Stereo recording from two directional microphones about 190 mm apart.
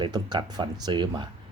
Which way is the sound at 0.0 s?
25° right (ahead or behind).